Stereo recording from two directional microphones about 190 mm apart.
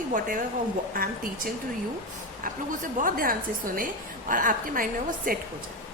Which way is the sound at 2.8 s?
45° right (ahead or behind).